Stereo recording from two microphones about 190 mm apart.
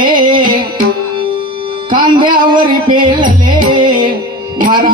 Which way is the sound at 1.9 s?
25° right (ahead or behind).